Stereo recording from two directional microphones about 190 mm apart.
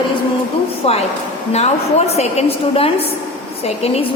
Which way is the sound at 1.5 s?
35° left (ahead or behind).